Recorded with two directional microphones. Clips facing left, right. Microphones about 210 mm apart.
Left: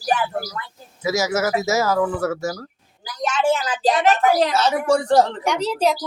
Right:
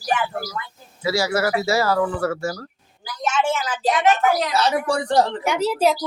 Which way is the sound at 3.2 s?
35° left (ahead or behind).